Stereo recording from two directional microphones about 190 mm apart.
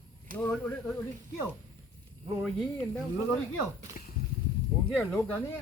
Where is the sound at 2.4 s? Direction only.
5° left (ahead or behind).